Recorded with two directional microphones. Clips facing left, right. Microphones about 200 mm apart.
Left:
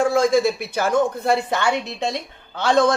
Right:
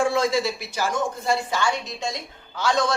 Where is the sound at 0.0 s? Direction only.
45° left (ahead or behind).